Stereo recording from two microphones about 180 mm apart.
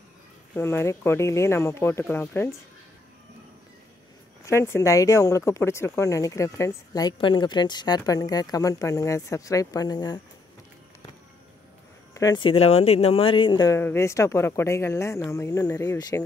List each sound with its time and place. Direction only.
0.6 s speech: 15° left (ahead or behind)
4.5 s speech: 15° left (ahead or behind)
12.1 s speech: 20° left (ahead or behind)